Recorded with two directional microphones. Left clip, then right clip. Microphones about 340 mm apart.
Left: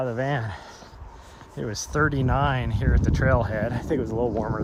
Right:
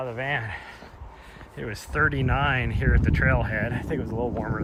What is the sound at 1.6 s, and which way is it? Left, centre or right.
Speech, centre.